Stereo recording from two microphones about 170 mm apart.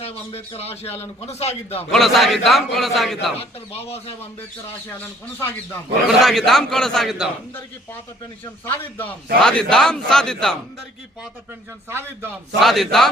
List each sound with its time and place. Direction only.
0.0 s speech: 35° left (ahead or behind)
1.9 s a man's voice: centre (ahead or behind)
3.3 s speech: 35° left (ahead or behind)
5.4 s speech: 10° left (ahead or behind)
6.2 s a man's voice: centre (ahead or behind)
8.7 s a man's voice: 10° left (ahead or behind)
11.9 s a man's voice: 15° right (ahead or behind)
12.5 s a man's voice: centre (ahead or behind)